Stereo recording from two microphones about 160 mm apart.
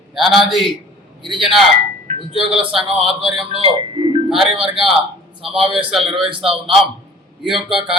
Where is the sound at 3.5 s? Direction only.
35° right (ahead or behind).